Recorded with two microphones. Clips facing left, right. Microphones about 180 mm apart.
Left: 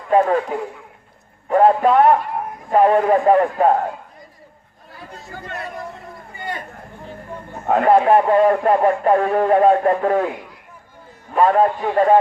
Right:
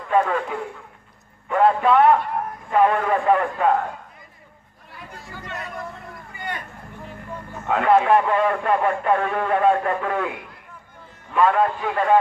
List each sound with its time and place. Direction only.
0.1 s a man's voice: 40° left (ahead or behind)
4.9 s speech: 45° left (ahead or behind)
7.5 s a man's voice: 40° left (ahead or behind)
11.3 s a man's voice: 40° left (ahead or behind)